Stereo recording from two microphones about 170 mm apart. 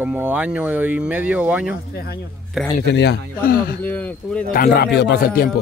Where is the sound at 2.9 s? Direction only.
80° left; by 3.7 s 60° left (ahead or behind).